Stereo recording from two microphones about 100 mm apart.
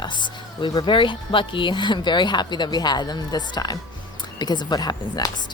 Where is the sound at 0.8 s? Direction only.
55° left (ahead or behind).